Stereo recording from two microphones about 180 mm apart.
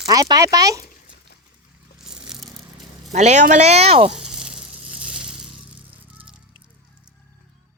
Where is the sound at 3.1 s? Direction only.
40° right (ahead or behind).